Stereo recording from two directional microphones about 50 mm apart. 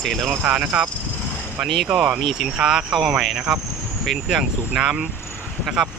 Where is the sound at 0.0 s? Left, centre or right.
Centre.